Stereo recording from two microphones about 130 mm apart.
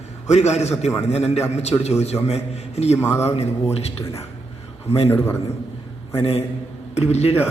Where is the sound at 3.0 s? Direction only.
20° left (ahead or behind).